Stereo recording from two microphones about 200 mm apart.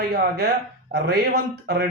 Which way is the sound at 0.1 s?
55° right (ahead or behind).